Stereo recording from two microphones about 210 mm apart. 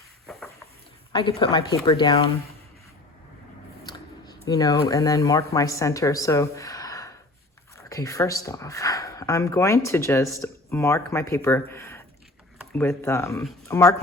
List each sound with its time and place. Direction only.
1.1 s speech: 25° left (ahead or behind)
4.4 s speech: 15° left (ahead or behind)